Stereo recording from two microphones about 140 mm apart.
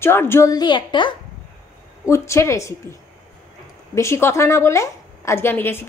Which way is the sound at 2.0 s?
20° left (ahead or behind).